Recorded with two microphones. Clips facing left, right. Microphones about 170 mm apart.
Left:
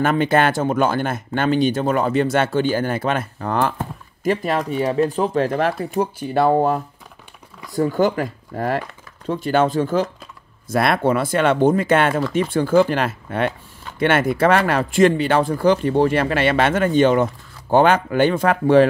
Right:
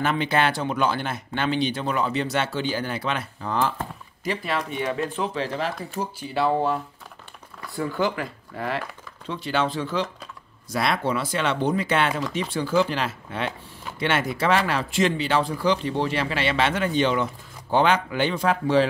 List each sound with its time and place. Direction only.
0.0 s speech: 50° left (ahead or behind)
4.2 s speech: 45° left (ahead or behind)